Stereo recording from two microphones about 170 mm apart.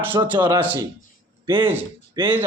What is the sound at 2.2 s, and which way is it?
Speech, 25° right (ahead or behind).